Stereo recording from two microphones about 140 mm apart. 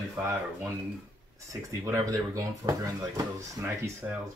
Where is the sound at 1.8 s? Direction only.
25° right (ahead or behind).